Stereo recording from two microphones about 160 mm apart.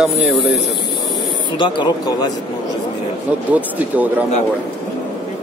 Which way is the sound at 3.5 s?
10° right (ahead or behind).